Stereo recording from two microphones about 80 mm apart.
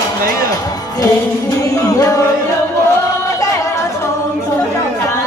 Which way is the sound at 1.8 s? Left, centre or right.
Left.